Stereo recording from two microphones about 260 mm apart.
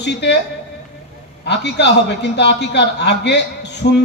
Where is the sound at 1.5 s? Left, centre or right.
Left.